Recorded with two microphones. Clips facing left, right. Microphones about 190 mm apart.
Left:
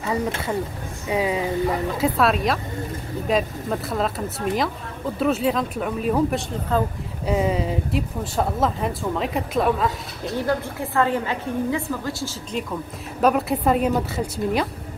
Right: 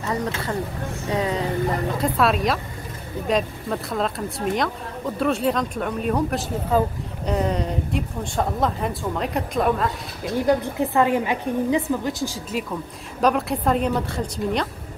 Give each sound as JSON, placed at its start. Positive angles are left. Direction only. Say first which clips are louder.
{"t": 1.1, "sound": "speech", "louder": "left 2 dB", "side_deg": 10}
{"t": 6.7, "sound": "a woman's voice", "louder": "right 2 dB", "side_deg": -10}
{"t": 7.2, "sound": "speech", "louder": "left 2 dB", "side_deg": 5}
{"t": 10.4, "sound": "a woman's voice", "louder": "right 5 dB", "side_deg": -20}
{"t": 13.2, "sound": "speech", "louder": "left 1 dB", "side_deg": 0}